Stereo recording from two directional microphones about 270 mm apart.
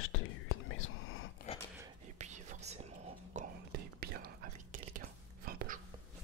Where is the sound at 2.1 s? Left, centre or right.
Right.